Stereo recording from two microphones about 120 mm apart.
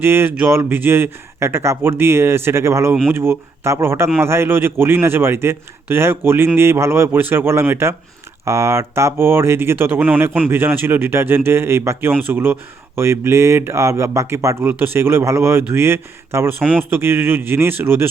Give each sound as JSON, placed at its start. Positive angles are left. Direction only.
{"t": 0.0, "sound": "speech", "side_deg": -20}